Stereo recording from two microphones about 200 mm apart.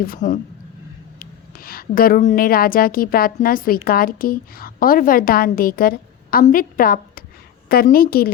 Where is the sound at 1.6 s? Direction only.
45° left (ahead or behind).